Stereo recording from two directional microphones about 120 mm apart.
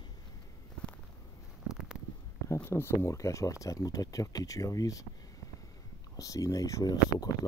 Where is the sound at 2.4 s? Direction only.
25° left (ahead or behind).